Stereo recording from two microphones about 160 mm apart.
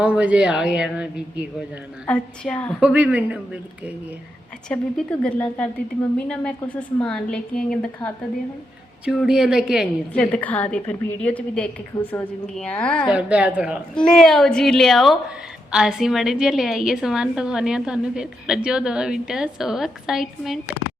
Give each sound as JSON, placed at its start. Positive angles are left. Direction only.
{"t": 0.0, "sound": "speech", "side_deg": -10}
{"t": 2.0, "sound": "a woman's voice", "side_deg": 5}
{"t": 2.8, "sound": "speech", "side_deg": -5}
{"t": 4.7, "sound": "a woman's voice", "side_deg": 5}
{"t": 10.1, "sound": "a woman's voice", "side_deg": 10}
{"t": 11.9, "sound": "a woman's voice", "side_deg": 20}
{"t": 12.5, "sound": "a woman's voice", "side_deg": 5}
{"t": 13.1, "sound": "speech", "side_deg": -5}
{"t": 13.9, "sound": "a woman's voice", "side_deg": 5}